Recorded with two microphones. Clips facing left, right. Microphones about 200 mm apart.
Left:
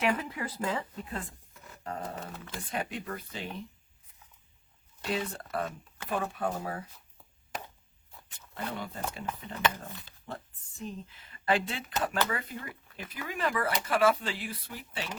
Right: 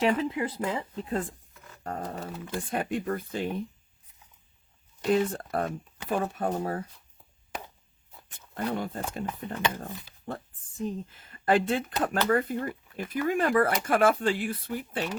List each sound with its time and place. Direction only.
0.0 s speech: 25° right (ahead or behind)
1.8 s speech: 45° right (ahead or behind)
5.1 s speech: 50° right (ahead or behind)
8.3 s speech: 50° right (ahead or behind)